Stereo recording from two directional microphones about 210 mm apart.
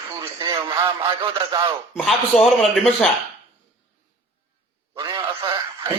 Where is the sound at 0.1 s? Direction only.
15° right (ahead or behind).